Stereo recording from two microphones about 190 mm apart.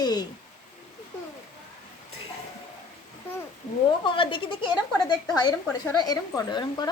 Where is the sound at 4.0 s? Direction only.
25° left (ahead or behind).